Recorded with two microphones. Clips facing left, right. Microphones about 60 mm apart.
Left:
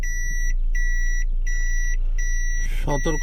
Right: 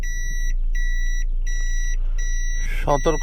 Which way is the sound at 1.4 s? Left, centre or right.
Left.